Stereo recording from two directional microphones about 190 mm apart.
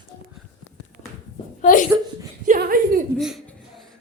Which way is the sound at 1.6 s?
45° left (ahead or behind).